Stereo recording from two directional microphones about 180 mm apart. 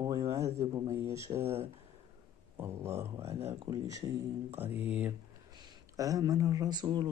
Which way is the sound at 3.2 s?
35° right (ahead or behind).